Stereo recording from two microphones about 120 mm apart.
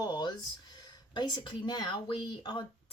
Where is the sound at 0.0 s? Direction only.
35° left (ahead or behind).